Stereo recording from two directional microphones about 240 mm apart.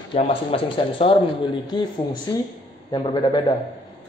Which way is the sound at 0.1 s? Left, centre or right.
Left.